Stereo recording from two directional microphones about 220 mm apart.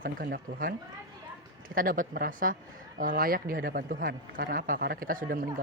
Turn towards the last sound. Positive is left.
turn(degrees=-40)  # may be behind; listen again after turning